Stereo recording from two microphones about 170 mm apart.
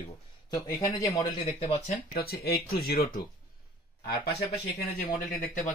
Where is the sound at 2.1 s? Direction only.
65° left (ahead or behind).